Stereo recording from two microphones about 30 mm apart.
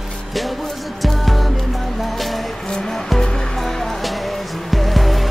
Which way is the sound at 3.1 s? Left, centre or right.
Centre.